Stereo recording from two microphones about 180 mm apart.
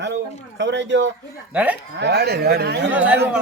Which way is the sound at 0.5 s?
80° right.